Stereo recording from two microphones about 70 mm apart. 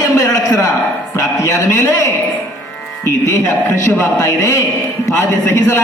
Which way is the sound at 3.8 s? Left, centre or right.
Left.